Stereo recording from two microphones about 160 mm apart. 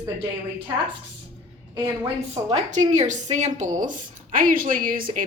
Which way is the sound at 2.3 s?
40° right (ahead or behind).